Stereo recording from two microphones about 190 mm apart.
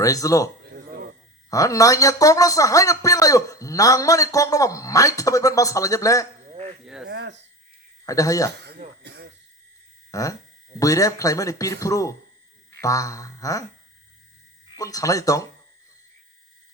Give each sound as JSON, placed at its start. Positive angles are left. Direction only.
{"t": 0.0, "sound": "speech", "side_deg": 15}
{"t": 6.8, "sound": "a sound", "side_deg": -5}
{"t": 7.1, "sound": "a sound", "side_deg": -65}
{"t": 8.0, "sound": "speech", "side_deg": 15}
{"t": 9.0, "sound": "throat clearing", "side_deg": -65}
{"t": 10.1, "sound": "speech", "side_deg": 20}
{"t": 14.8, "sound": "speech", "side_deg": 15}